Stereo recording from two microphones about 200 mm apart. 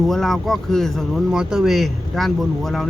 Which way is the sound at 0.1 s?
Centre (ahead or behind).